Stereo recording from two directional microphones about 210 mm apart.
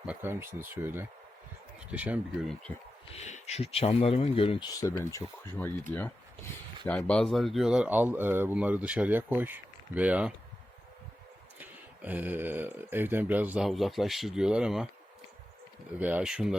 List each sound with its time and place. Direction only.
0.1 s speech: 10° right (ahead or behind)
3.2 s speech: 35° left (ahead or behind); by 10.3 s 5° right (ahead or behind)
11.6 s speech: 10° right (ahead or behind)
16.0 s speech: 10° right (ahead or behind)